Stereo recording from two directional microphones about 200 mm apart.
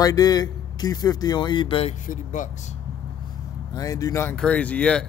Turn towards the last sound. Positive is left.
turn(degrees=5)  # may be behind; listen again after turning